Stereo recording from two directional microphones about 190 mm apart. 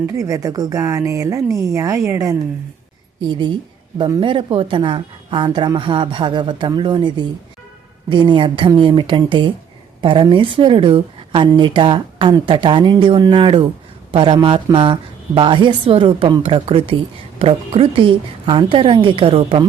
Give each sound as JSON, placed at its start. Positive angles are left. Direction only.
{"t": 0.0, "sound": "a woman's voice", "side_deg": -15}